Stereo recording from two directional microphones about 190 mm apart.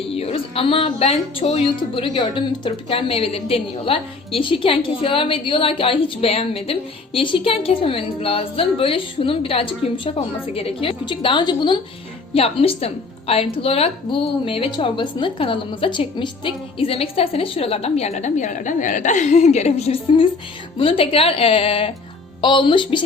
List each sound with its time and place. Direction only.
0.1 s speech: 30° left (ahead or behind)